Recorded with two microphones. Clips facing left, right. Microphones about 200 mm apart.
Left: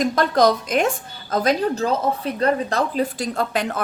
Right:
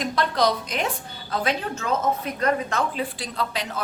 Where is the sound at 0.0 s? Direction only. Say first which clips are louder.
Left 6 dB; 45° left (ahead or behind).